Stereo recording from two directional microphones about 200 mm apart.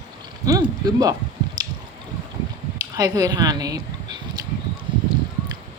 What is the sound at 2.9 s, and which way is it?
Speech, 20° right (ahead or behind).